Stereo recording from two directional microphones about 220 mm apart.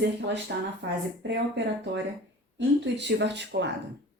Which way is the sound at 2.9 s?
50° right (ahead or behind).